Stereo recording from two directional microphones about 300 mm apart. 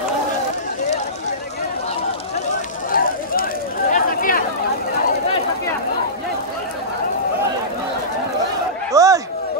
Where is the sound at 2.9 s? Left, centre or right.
Left.